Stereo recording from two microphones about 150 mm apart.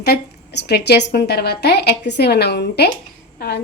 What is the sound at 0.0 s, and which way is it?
A woman's voice, 90° left.